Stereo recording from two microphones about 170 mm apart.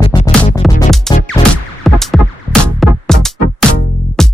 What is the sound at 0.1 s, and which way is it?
Music, 20° left (ahead or behind).